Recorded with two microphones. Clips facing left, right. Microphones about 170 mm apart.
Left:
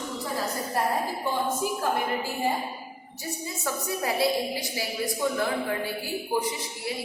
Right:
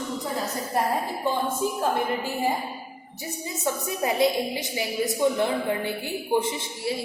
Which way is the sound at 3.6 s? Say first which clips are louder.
Right 3 dB; 20° right (ahead or behind).